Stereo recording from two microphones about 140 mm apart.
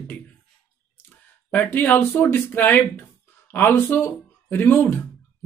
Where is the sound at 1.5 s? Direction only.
15° left (ahead or behind).